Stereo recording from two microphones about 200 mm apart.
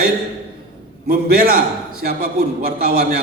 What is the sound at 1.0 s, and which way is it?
A man's voice, 50° right (ahead or behind).